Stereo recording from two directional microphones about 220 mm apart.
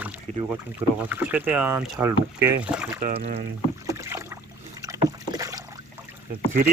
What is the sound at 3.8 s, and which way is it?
Rowboat, 15° right (ahead or behind).